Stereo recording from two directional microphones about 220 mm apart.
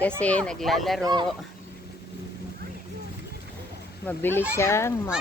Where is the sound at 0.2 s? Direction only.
5° left (ahead or behind).